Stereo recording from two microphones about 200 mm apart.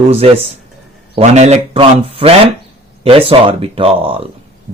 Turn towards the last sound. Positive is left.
turn(degrees=-30)  # may be behind; listen again after turning